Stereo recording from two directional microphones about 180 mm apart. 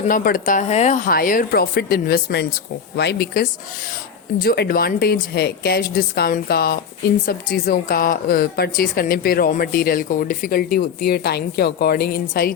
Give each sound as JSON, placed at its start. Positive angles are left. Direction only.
{"t": 0.1, "sound": "a woman's voice", "side_deg": 50}